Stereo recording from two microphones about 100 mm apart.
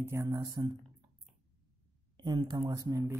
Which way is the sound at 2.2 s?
45° right (ahead or behind).